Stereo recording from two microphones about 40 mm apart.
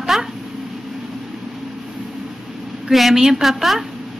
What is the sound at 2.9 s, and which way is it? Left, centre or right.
Speech, centre.